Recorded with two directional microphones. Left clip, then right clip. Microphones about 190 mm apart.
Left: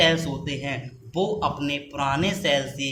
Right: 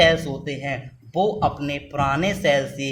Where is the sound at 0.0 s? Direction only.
50° right (ahead or behind).